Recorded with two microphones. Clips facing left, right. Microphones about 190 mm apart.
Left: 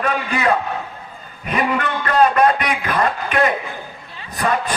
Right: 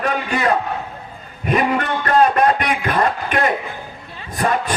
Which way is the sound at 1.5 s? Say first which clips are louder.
Right 2 dB; 45° right (ahead or behind).